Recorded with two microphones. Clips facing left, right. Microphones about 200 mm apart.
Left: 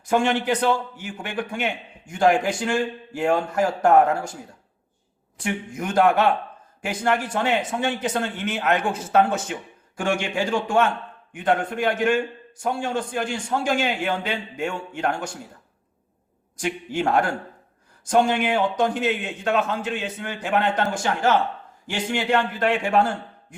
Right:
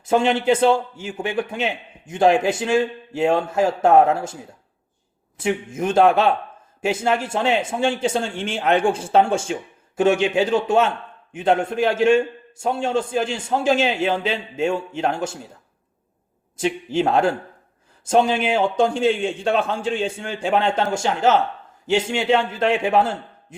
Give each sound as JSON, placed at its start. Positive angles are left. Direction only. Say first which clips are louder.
{"t": 0.0, "sound": "a man's voice", "louder": "right 3 dB", "side_deg": -25}
{"t": 5.4, "sound": "a man's voice", "louder": "right 5 dB", "side_deg": -25}
{"t": 16.6, "sound": "a man's voice", "louder": "right 5 dB", "side_deg": -25}